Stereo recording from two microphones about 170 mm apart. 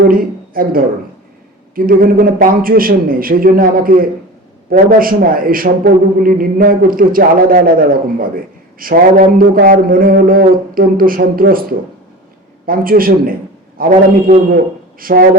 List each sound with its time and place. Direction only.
0.1 s a woman's voice: 55° right (ahead or behind)